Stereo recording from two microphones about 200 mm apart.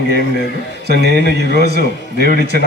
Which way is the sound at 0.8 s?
55° right (ahead or behind).